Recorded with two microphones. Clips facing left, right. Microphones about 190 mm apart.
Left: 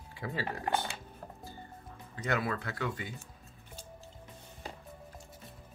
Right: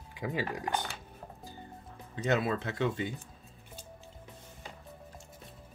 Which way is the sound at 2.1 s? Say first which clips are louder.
Right 4 dB; 25° right (ahead or behind).